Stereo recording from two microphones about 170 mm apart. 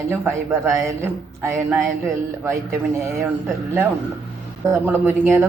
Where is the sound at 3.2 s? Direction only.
10° right (ahead or behind).